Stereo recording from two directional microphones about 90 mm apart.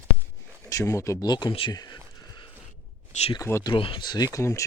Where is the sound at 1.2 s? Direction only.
50° left (ahead or behind).